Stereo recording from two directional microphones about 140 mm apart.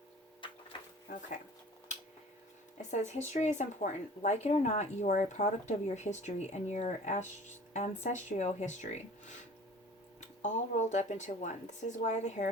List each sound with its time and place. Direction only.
0.4 s printer: 35° left (ahead or behind)
2.9 s speech: 55° left (ahead or behind)
10.2 s speech: 55° left (ahead or behind)